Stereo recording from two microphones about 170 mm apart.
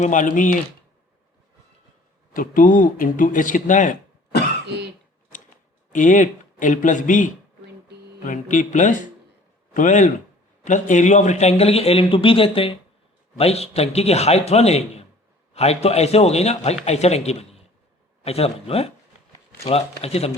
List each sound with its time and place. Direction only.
0.0 s speech: 50° left (ahead or behind)
2.3 s speech: 55° left (ahead or behind)
5.9 s a man's voice: 50° left (ahead or behind)
20.0 s a man's voice: 35° left (ahead or behind)